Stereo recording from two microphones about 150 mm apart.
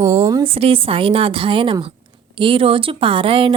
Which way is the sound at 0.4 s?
40° right (ahead or behind).